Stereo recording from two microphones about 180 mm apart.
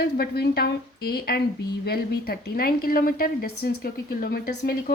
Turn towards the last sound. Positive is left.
turn(degrees=60)  # may be behind; listen again after turning